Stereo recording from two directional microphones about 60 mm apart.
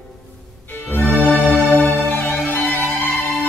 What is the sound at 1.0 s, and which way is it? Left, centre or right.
Music, centre.